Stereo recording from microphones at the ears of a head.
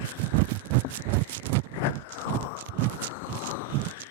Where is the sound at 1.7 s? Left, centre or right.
Left.